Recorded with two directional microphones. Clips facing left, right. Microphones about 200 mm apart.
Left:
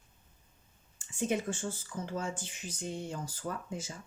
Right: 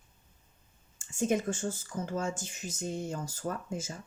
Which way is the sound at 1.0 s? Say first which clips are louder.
Right 3 dB; 45° right (ahead or behind).